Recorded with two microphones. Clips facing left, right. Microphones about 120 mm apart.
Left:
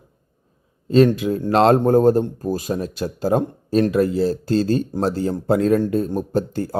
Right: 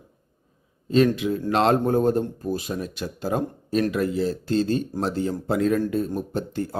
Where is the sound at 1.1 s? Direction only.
40° left (ahead or behind).